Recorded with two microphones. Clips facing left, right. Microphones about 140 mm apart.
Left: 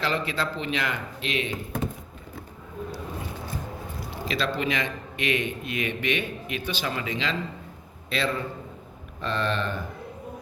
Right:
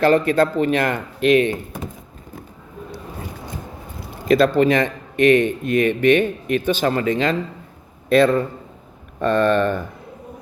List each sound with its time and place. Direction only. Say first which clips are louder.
0.0 s speech: right 12 dB; 50° right (ahead or behind)
4.3 s speech: right 13 dB; 50° right (ahead or behind)